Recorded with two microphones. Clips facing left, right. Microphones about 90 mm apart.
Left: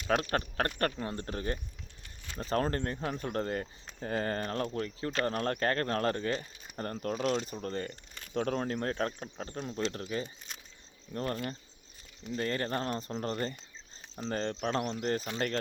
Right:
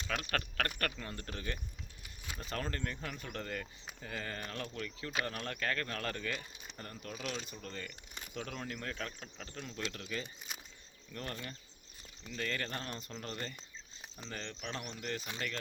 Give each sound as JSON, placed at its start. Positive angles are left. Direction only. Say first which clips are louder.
{"t": 0.1, "sound": "speech", "louder": "left 8 dB", "side_deg": 30}
{"t": 6.7, "sound": "speech", "louder": "left 12 dB", "side_deg": 50}
{"t": 10.5, "sound": "a sound", "louder": "even", "side_deg": -10}
{"t": 11.1, "sound": "speech", "louder": "left 9 dB", "side_deg": 30}